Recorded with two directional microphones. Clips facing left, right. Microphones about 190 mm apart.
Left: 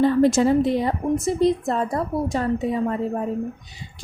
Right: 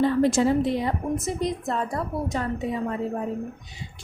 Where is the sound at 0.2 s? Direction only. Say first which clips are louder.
Left 3 dB; 45° left (ahead or behind).